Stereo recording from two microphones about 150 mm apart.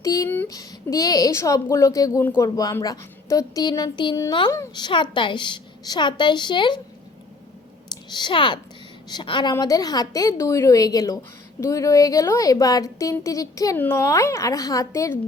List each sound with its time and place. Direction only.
0.0 s a woman's voice: 20° left (ahead or behind)
8.1 s a woman's voice: 30° left (ahead or behind)